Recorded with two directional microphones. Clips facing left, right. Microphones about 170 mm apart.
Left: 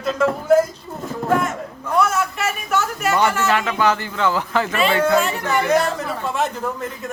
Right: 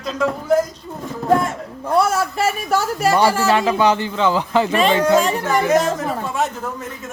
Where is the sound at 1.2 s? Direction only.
35° right (ahead or behind).